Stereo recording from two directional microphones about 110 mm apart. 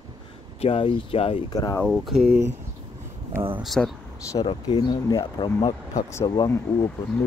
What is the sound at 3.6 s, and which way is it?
Speech, centre (ahead or behind).